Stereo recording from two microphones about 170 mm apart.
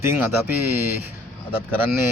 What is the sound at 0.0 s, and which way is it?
Speech, 15° right (ahead or behind).